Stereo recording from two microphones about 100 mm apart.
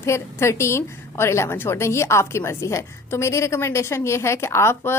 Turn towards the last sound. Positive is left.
turn(degrees=25)  # may be behind; listen again after turning